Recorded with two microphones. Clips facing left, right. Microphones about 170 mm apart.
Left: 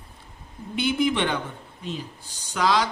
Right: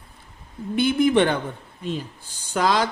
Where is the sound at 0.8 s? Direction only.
50° right (ahead or behind).